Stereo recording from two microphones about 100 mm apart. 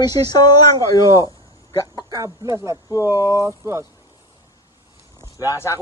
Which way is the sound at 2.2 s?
30° right (ahead or behind).